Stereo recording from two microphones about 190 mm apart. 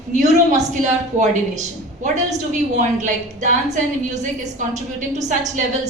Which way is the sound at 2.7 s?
40° right (ahead or behind).